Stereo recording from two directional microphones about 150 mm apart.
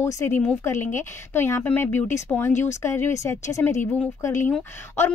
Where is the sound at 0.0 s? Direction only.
20° left (ahead or behind).